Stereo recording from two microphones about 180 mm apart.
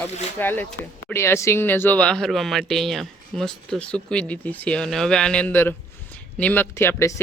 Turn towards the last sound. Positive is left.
turn(degrees=15)  # may be behind; listen again after turning